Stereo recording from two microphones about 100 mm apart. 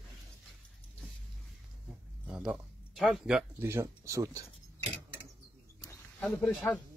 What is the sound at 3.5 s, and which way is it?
Speech, 25° right (ahead or behind).